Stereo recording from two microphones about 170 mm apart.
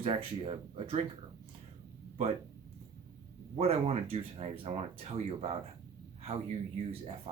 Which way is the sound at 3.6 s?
35° right (ahead or behind).